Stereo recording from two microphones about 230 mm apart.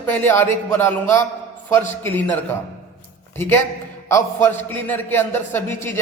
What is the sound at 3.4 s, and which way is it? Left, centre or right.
A man's voice, centre.